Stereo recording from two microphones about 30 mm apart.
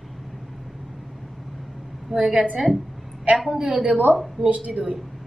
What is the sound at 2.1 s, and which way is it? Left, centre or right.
Speech, centre.